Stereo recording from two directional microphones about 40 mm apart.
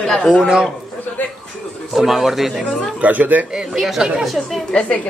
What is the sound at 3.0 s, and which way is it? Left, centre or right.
Speech, right.